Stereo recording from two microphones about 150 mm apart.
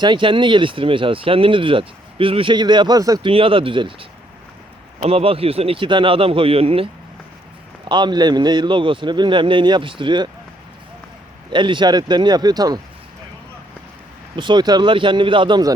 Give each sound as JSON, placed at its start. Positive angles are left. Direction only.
{"t": 0.0, "sound": "speech", "side_deg": -35}
{"t": 3.3, "sound": "speech", "side_deg": -35}
{"t": 5.0, "sound": "speech", "side_deg": -40}
{"t": 7.9, "sound": "speech", "side_deg": -30}
{"t": 11.5, "sound": "speech", "side_deg": -30}
{"t": 14.3, "sound": "speech", "side_deg": -30}